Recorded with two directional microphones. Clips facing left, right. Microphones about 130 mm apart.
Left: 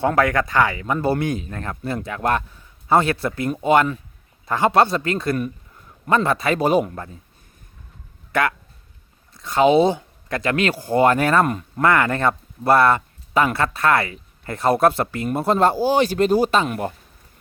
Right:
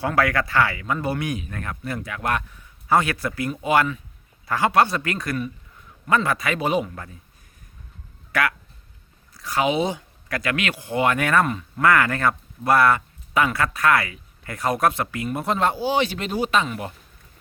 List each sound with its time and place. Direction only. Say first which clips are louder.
0.2 s speech: right 1 dB; 20° left (ahead or behind)
0.9 s speech: left 7 dB; 35° left (ahead or behind)
8.3 s speech: left 3 dB; 25° left (ahead or behind)
16.6 s speech: left 5 dB; 50° left (ahead or behind)